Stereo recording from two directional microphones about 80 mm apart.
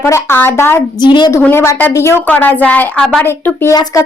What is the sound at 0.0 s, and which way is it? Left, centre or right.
Speech, left.